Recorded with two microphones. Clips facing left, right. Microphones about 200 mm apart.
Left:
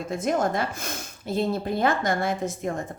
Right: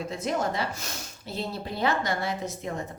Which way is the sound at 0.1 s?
50° left (ahead or behind).